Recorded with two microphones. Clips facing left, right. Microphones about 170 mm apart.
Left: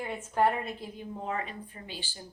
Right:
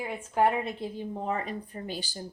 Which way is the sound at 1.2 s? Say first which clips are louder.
Right 2 dB; 35° right (ahead or behind).